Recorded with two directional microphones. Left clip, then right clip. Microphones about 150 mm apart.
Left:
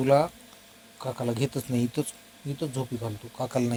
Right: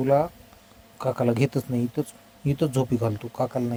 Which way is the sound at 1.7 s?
10° right (ahead or behind).